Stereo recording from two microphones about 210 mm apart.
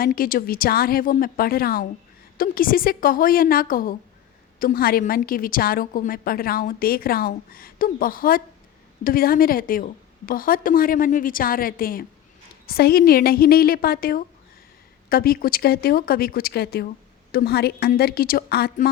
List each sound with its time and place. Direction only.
0.0 s a woman's voice: 45° left (ahead or behind)